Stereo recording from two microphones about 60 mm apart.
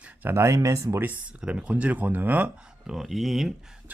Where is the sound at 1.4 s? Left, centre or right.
Centre.